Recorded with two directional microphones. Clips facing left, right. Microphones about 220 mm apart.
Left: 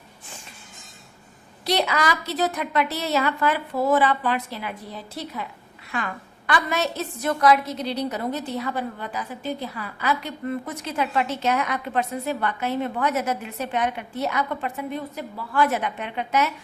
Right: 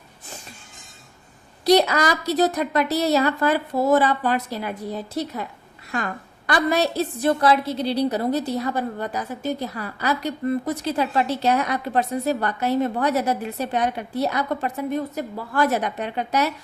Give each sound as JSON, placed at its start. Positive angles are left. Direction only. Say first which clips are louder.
{"t": 1.6, "sound": "a woman's voice", "louder": "right 6 dB", "side_deg": -40}